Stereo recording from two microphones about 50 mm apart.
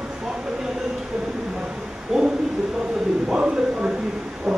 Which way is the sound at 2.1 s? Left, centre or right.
Centre.